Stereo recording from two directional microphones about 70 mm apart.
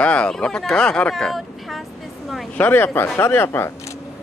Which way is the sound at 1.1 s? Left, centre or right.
Centre.